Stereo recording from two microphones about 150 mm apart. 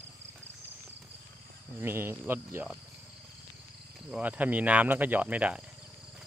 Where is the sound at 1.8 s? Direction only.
15° right (ahead or behind).